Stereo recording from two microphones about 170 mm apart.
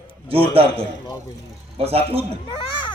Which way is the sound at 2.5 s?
30° left (ahead or behind).